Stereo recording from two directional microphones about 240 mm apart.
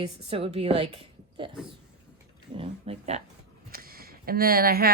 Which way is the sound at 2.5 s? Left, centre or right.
Right.